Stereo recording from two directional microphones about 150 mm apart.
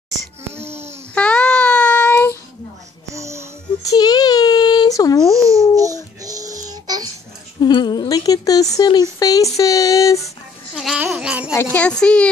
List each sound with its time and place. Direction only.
0.5 s babbling: 15° right (ahead or behind)
1.1 s child singing: 10° left (ahead or behind)
3.1 s music: 20° right (ahead or behind)
3.8 s a sound: 25° left (ahead or behind)
5.3 s babbling: 20° right (ahead or behind)
6.2 s music: 25° right (ahead or behind)
7.6 s speech: 30° left (ahead or behind)
10.7 s a child's voice: 5° right (ahead or behind)
11.5 s a sound: 10° left (ahead or behind)